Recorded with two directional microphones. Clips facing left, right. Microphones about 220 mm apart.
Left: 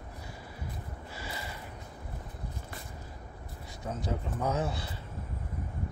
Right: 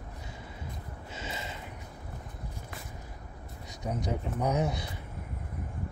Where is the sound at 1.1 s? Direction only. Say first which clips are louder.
Right 3 dB; 20° right (ahead or behind).